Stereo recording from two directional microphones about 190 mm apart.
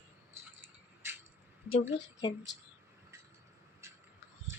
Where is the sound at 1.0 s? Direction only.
10° right (ahead or behind).